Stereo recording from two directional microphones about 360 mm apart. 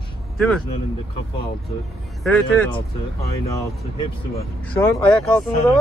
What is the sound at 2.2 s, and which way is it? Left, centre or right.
Speech, centre.